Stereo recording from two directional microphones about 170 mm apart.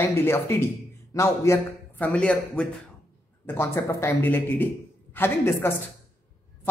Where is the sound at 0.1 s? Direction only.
15° left (ahead or behind).